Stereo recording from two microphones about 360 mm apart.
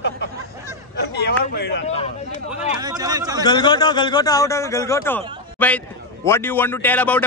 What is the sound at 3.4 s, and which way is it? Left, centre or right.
A man's voice, centre.